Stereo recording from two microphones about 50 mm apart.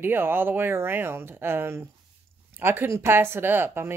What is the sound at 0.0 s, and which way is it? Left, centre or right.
Speech, right.